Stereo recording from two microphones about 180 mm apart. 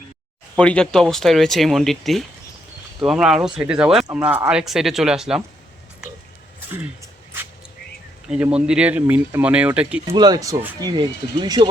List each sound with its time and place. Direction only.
0.5 s speech: 5° left (ahead or behind)
8.3 s speech: 5° right (ahead or behind)
10.1 s speech: 25° right (ahead or behind)